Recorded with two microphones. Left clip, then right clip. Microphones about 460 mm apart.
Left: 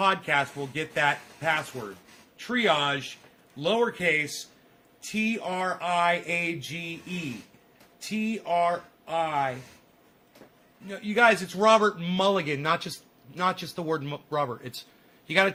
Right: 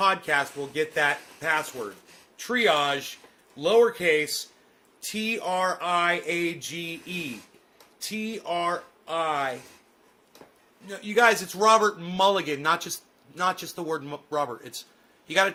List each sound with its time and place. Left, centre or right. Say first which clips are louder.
0.0 s speech: right 1 dB; centre
8.1 s speech: left 3 dB; centre
10.8 s speech: right 1 dB; centre